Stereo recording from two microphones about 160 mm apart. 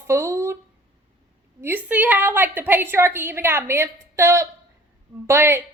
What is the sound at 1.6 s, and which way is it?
A woman's voice, 10° right (ahead or behind).